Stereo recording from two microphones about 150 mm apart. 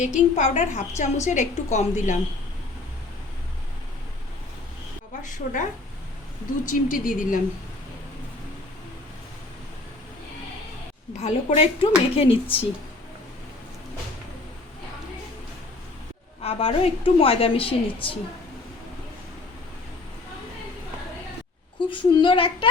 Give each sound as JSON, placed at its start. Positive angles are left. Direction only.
{"t": 0.3, "sound": "a woman's voice", "side_deg": 50}
{"t": 5.2, "sound": "a woman's voice", "side_deg": 60}
{"t": 6.7, "sound": "speech", "side_deg": 60}
{"t": 11.2, "sound": "a woman's voice", "side_deg": 40}
{"t": 16.4, "sound": "a woman's voice", "side_deg": 40}
{"t": 21.8, "sound": "a woman's voice", "side_deg": 35}